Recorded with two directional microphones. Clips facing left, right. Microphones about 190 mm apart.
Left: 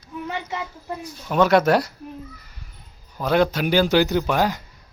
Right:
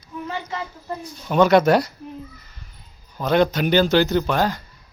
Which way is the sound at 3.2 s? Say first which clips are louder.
Right 1 dB; 5° left (ahead or behind).